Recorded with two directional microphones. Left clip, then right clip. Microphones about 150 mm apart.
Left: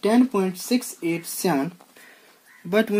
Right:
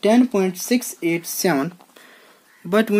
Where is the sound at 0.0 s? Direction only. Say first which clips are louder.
Right 4 dB; 45° right (ahead or behind).